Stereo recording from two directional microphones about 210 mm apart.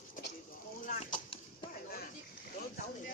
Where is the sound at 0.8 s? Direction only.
35° left (ahead or behind).